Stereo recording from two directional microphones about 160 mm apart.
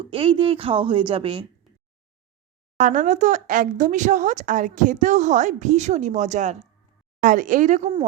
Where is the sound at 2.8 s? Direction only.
55° right (ahead or behind).